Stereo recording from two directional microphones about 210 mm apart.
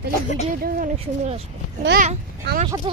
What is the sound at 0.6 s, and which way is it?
Speech, 35° right (ahead or behind).